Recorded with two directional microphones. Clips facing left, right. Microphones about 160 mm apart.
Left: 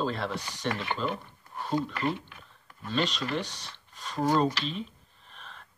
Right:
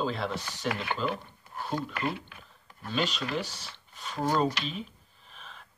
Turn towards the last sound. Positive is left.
turn(degrees=0)  # may be behind; listen again after turning